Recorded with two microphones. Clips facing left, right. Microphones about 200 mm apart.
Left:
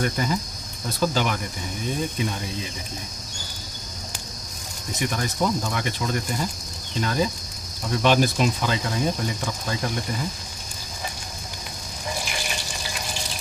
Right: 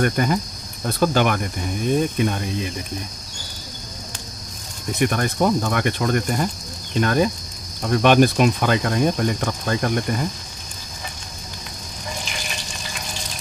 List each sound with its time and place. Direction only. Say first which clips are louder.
0.0 s speech: right 5 dB; 60° right (ahead or behind)
4.9 s speech: right 6 dB; 60° right (ahead or behind)